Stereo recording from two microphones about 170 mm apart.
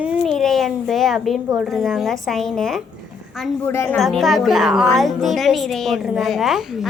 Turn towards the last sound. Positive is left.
turn(degrees=0)  # may be behind; listen again after turning